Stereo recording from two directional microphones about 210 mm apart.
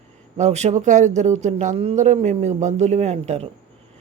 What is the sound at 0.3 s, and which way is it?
Speech, 35° right (ahead or behind).